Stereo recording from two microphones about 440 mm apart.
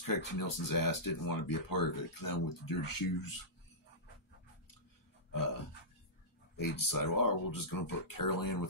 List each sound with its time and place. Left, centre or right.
0.0 s speech: left
5.3 s burping: left
6.9 s speech: left